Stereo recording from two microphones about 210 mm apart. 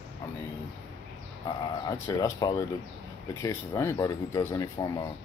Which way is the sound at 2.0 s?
15° left (ahead or behind).